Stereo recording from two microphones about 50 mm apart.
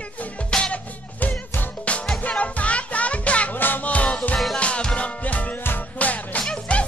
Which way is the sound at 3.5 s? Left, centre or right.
Left.